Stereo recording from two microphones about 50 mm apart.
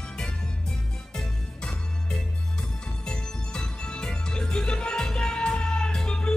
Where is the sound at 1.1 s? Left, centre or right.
Centre.